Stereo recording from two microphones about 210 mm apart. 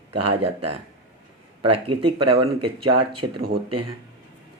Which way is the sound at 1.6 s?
25° right (ahead or behind).